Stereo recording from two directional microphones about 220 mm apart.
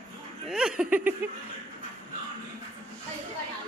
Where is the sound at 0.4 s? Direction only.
Centre (ahead or behind).